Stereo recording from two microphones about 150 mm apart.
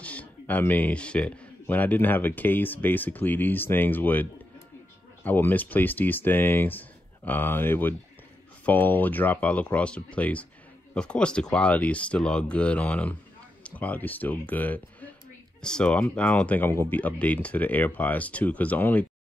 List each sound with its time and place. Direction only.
0.0 s speech: 10° left (ahead or behind)